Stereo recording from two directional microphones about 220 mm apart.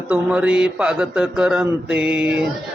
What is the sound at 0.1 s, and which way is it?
A man's voice, 5° right (ahead or behind).